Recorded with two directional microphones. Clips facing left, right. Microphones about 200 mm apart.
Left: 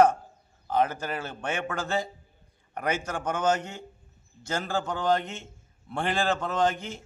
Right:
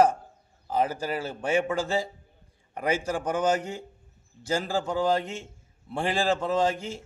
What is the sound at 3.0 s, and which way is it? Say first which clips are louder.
A man's voice: right 1 dB; 35° right (ahead or behind).